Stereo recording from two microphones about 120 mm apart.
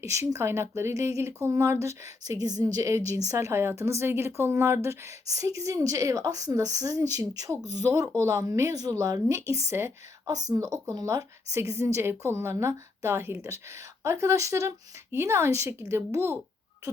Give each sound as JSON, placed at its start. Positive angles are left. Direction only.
{"t": 0.0, "sound": "a woman's voice", "side_deg": -25}